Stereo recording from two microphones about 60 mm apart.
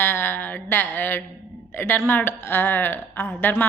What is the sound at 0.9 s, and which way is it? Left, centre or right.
A man's voice, left.